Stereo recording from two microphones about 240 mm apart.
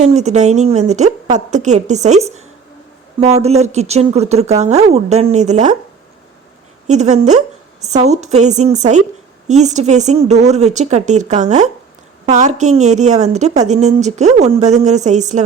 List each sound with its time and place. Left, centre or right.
0.0 s speech: right
6.8 s speech: right